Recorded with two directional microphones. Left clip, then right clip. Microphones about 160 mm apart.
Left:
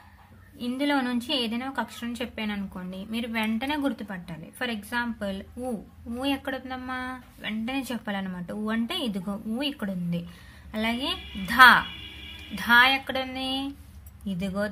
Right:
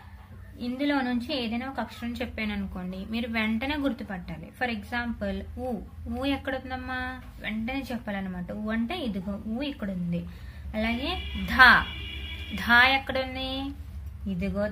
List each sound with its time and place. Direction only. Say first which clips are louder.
0.7 s a woman's voice: left 1 dB; 40° left (ahead or behind)
14.4 s a woman's voice: even; 45° left (ahead or behind)